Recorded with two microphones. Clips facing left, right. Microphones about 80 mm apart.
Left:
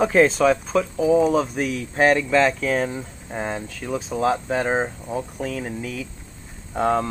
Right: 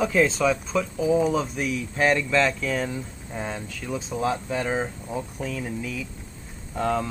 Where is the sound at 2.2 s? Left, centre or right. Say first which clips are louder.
Left 4 dB; left.